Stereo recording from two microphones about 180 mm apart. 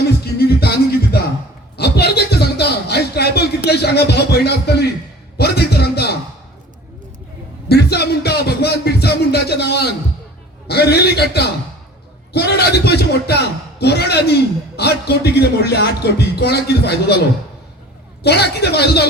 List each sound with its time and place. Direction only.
0.3 s music: 60° left (ahead or behind)
1.7 s a sound: 65° left (ahead or behind)
5.4 s music: 65° left (ahead or behind)
7.7 s music: 65° left (ahead or behind)
10.7 s a sound: 65° left (ahead or behind)
14.8 s speech: 65° left (ahead or behind)
18.2 s speech: 65° left (ahead or behind)